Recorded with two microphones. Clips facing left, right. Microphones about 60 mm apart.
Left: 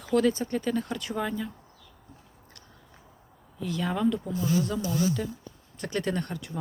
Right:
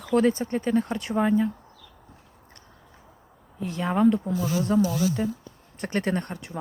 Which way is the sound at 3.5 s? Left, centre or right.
Right.